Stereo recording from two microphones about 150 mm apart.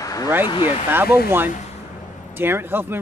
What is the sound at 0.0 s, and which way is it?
Vehicle, 25° left (ahead or behind).